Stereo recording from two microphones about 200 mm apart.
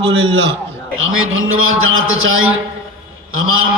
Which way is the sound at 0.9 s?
90° right.